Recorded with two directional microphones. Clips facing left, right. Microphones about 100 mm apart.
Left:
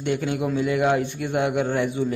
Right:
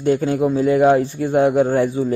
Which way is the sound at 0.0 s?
35° right (ahead or behind).